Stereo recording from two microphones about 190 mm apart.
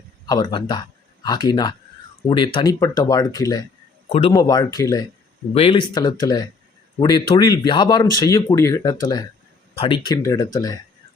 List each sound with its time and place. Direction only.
0.3 s speech: 20° left (ahead or behind)